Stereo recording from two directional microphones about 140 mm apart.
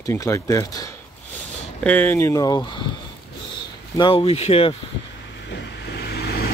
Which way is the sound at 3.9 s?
35° left (ahead or behind).